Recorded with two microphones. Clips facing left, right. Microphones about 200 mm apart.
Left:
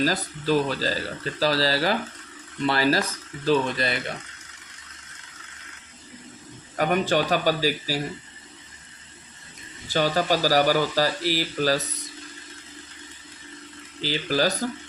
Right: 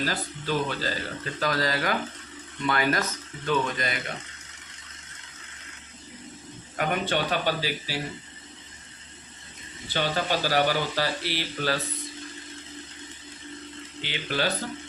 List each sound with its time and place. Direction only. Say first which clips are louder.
0.0 s speech: left 6 dB; 40° left (ahead or behind)
6.7 s speech: left 5 dB; 40° left (ahead or behind)
9.9 s speech: left 5 dB; 40° left (ahead or behind)
14.0 s speech: left 5 dB; 35° left (ahead or behind)